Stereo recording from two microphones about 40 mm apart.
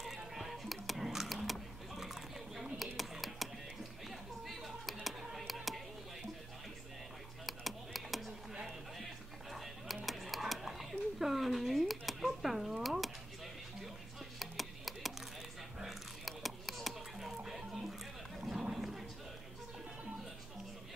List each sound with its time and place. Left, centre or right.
0.0 s music: centre
4.5 s computer keyboard: centre
7.4 s a sound: centre
8.6 s music: centre
14.4 s music: centre
15.8 s a sound: centre
17.5 s music: centre
18.5 s horse: centre